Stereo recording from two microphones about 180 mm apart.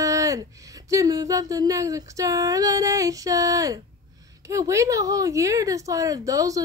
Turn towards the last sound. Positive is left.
turn(degrees=-20)  # may be behind; listen again after turning